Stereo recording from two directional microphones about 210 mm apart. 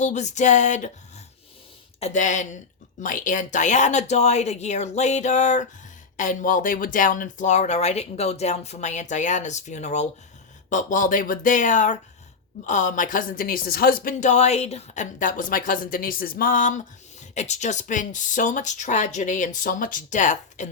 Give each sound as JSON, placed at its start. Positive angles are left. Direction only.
{"t": 0.0, "sound": "a woman's voice", "side_deg": 35}
{"t": 2.0, "sound": "a woman's voice", "side_deg": 35}